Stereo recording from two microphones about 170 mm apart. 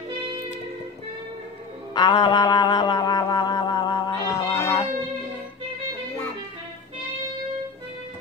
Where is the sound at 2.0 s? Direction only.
25° left (ahead or behind).